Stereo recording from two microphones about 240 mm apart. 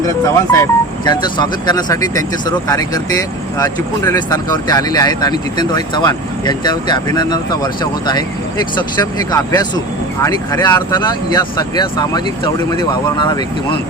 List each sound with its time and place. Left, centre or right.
0.5 s speech: centre